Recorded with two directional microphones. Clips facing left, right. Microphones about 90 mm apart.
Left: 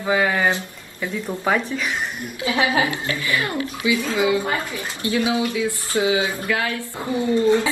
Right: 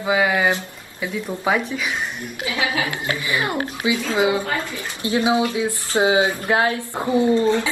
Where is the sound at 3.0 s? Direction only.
20° right (ahead or behind).